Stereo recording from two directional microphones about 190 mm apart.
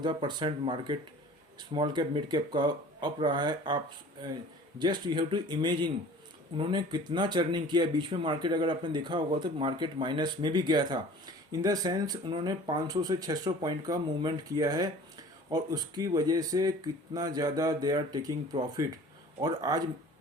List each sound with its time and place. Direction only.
0.0 s speech: 25° right (ahead or behind)
4.8 s speech: 25° right (ahead or behind)